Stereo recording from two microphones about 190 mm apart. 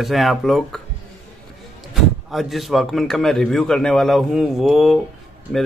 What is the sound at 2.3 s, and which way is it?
A man's voice, centre (ahead or behind).